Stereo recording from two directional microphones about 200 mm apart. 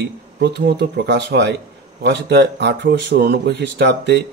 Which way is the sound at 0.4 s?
55° right (ahead or behind).